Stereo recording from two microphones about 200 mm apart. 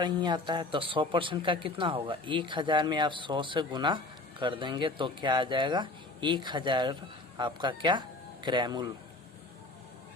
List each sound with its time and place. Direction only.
0.0 s speech: 20° right (ahead or behind)